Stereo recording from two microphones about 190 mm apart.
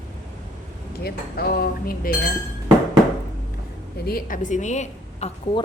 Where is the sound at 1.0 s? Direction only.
55° left (ahead or behind).